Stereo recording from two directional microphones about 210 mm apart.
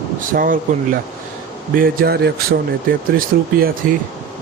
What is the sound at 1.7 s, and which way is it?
Speech, 45° right (ahead or behind).